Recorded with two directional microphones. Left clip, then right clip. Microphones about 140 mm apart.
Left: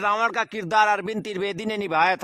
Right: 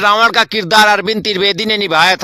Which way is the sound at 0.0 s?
35° right (ahead or behind).